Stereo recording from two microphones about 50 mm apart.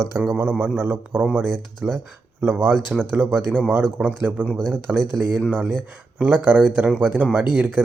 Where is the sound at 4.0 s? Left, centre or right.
Centre.